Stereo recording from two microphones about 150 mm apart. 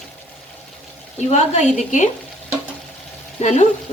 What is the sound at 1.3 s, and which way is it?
Speech, 50° left (ahead or behind).